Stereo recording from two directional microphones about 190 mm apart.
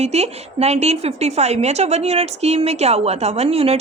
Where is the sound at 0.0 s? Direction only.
35° right (ahead or behind).